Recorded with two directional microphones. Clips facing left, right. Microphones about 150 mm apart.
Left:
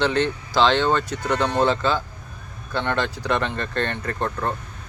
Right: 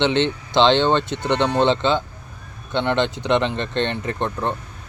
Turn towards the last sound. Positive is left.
turn(degrees=-20)  # may be behind; listen again after turning